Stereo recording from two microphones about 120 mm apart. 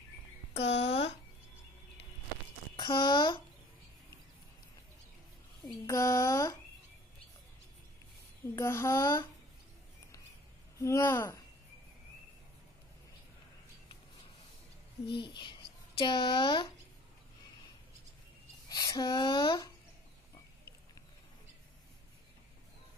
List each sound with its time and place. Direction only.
0.5 s a sound: 60° left (ahead or behind)
2.7 s speech: 40° left (ahead or behind)
5.9 s speech: 25° left (ahead or behind)
8.5 s speech: 25° left (ahead or behind)
10.8 s speech: 25° left (ahead or behind)
15.2 s speech: 40° left (ahead or behind)
18.7 s speech: 30° left (ahead or behind)